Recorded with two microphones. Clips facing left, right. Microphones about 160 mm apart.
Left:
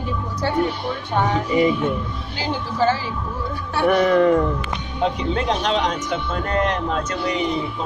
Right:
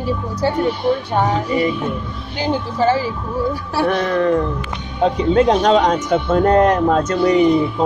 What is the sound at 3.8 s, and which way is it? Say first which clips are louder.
Speech: left 2 dB; 10° left (ahead or behind).